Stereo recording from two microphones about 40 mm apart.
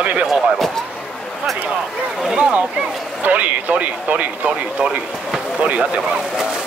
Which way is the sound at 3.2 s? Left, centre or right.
Right.